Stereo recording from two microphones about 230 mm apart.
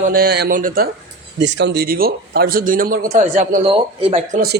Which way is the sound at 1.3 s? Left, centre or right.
Right.